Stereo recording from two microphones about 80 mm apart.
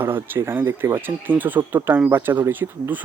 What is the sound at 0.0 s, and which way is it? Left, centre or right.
Speech, right.